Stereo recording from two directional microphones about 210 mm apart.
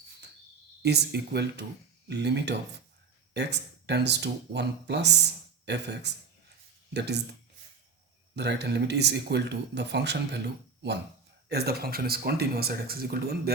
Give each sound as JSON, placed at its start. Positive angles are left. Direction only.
{"t": 0.8, "sound": "speech", "side_deg": -50}
{"t": 8.4, "sound": "speech", "side_deg": -55}